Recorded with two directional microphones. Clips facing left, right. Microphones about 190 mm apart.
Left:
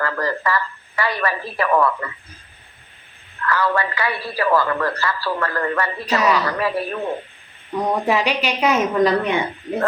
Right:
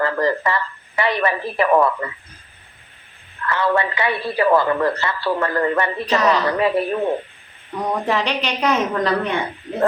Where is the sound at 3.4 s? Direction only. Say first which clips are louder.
Right 1 dB; 20° right (ahead or behind).